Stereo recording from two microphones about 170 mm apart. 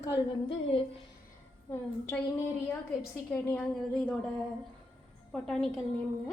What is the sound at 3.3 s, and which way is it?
Speech, 10° left (ahead or behind).